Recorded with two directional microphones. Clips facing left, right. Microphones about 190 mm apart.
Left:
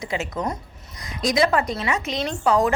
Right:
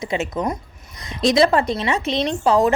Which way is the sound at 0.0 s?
25° right (ahead or behind).